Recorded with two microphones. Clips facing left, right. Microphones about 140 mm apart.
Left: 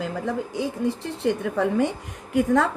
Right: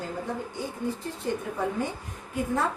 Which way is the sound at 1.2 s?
75° left (ahead or behind).